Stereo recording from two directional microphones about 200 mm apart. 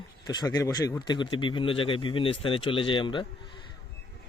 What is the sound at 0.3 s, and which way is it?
Speech, 20° left (ahead or behind).